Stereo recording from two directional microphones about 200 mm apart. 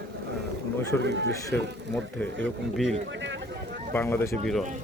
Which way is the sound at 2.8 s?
65° right (ahead or behind).